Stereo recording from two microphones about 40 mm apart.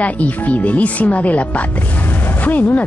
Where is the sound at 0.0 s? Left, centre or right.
Left.